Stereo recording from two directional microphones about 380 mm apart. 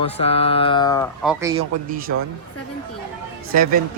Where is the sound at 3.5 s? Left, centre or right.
Right.